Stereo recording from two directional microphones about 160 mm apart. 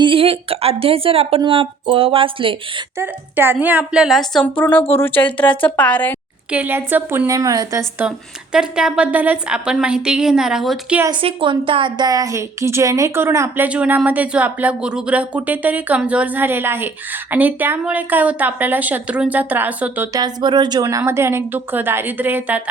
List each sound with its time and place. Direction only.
0.0 s a woman's voice: 35° right (ahead or behind)
3.0 s a woman's voice: 15° right (ahead or behind); by 6.1 s 10° left (ahead or behind)
6.5 s a woman's voice: 10° right (ahead or behind)
11.1 s a woman's voice: 35° right (ahead or behind); by 20.1 s 10° right (ahead or behind)
20.1 s a woman's voice: 25° right (ahead or behind); by 22.6 s 10° right (ahead or behind)